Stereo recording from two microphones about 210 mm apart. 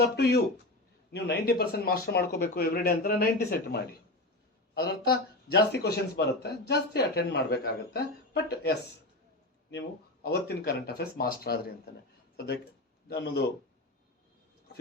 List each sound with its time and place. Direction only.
0.0 s speech: 50° left (ahead or behind)
4.7 s speech: 50° left (ahead or behind)
10.2 s speech: 50° left (ahead or behind)
13.1 s speech: 50° left (ahead or behind)